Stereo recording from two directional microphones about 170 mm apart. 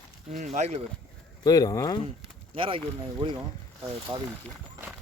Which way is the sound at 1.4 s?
20° left (ahead or behind).